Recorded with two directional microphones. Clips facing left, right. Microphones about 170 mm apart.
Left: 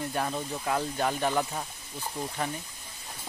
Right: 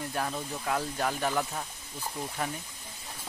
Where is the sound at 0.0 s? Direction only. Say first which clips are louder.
Left 2 dB; 5° left (ahead or behind).